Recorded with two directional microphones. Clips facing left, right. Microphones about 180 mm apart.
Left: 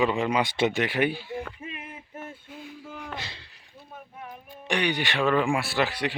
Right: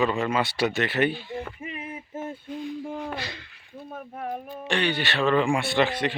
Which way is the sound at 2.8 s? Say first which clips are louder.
Right 8 dB; 35° right (ahead or behind).